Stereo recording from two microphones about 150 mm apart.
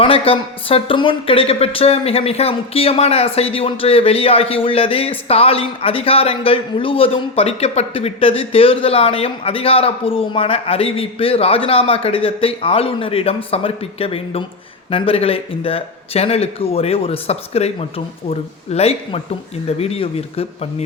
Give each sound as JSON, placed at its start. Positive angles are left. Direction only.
{"t": 0.0, "sound": "a woman's voice", "side_deg": 40}